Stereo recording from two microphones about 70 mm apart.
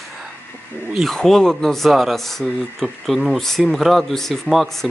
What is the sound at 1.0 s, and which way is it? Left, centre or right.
Speech, centre.